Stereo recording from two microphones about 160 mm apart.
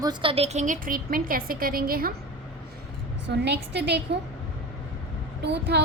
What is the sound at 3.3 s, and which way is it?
Speech, 90° right.